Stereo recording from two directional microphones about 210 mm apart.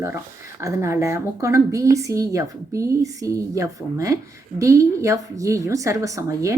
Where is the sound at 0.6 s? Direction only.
15° right (ahead or behind).